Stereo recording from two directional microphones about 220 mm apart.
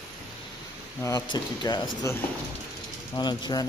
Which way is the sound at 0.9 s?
15° left (ahead or behind).